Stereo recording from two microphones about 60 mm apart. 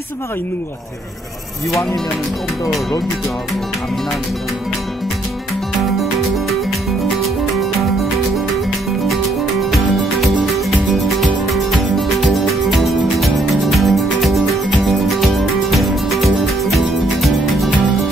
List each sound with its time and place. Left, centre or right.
1.7 s speech: left
9.7 s music: centre